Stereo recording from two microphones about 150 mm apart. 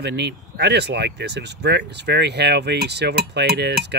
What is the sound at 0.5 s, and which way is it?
Speech, 90° right.